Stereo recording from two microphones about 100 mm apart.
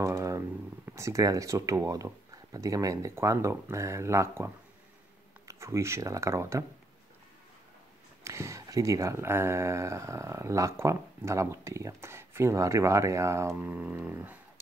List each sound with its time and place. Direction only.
0.0 s a sound: 30° right (ahead or behind)
0.8 s speech: 30° right (ahead or behind)
5.5 s speech: 30° right (ahead or behind)
8.2 s speech: 30° right (ahead or behind)